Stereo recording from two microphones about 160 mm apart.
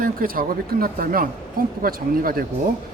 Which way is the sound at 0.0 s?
65° right (ahead or behind).